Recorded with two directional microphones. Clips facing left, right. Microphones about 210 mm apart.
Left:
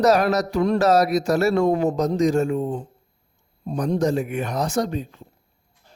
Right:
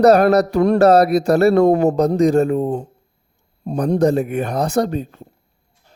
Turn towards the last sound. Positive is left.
turn(degrees=-50)  # may be behind; listen again after turning